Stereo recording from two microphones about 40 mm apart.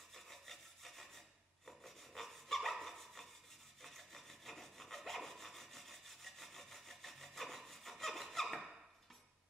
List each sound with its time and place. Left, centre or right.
0.1 s rub: centre
3.8 s wood: centre